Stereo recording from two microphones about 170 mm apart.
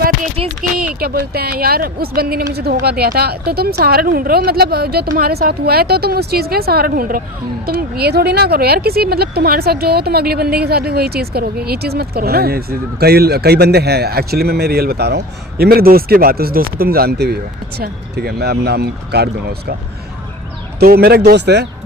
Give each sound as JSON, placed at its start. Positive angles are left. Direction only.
{"t": 0.9, "sound": "speech", "side_deg": -60}
{"t": 20.7, "sound": "speech", "side_deg": -65}